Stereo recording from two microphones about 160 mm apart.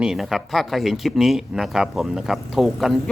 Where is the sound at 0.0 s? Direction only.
Centre (ahead or behind).